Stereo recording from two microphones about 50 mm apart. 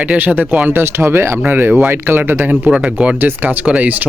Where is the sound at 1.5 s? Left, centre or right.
Right.